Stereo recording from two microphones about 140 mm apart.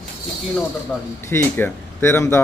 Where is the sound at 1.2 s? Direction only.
15° left (ahead or behind).